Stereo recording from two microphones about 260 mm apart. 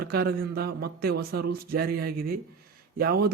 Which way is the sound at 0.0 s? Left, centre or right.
Right.